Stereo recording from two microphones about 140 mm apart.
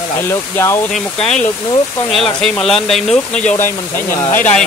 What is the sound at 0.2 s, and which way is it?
Speech, 15° left (ahead or behind).